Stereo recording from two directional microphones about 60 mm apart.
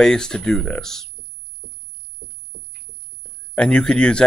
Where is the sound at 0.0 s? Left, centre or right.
Centre.